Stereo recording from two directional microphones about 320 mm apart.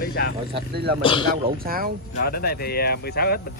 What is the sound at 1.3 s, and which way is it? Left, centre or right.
Speech, right.